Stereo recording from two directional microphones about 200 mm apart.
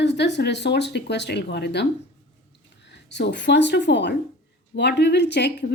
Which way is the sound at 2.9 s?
60° left (ahead or behind).